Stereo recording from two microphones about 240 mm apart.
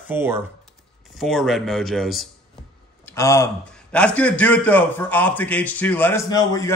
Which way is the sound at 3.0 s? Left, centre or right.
Centre.